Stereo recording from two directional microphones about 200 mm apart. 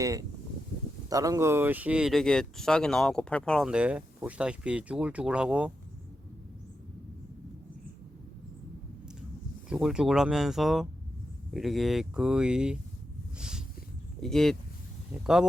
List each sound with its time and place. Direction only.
0.0 s speech: 15° right (ahead or behind)
9.6 s speech: 5° right (ahead or behind)
13.4 s a sound: 5° right (ahead or behind)
14.2 s speech: centre (ahead or behind)